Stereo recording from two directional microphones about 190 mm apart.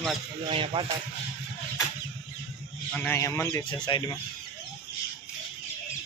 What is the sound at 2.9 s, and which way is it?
Speech, 10° left (ahead or behind).